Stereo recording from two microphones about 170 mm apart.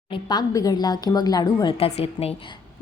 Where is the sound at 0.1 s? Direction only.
25° left (ahead or behind).